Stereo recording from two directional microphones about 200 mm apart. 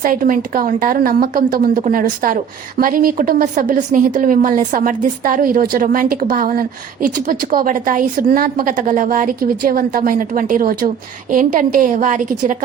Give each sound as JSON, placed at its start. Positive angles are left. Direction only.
{"t": 0.0, "sound": "a woman's voice", "side_deg": -45}